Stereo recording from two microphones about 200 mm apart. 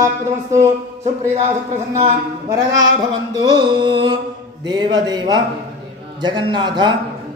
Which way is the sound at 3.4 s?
25° right (ahead or behind).